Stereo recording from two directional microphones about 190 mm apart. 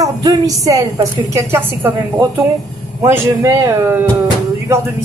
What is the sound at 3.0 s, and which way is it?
A woman's voice, 15° right (ahead or behind).